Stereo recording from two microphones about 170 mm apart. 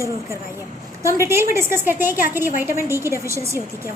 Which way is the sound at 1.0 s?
15° right (ahead or behind).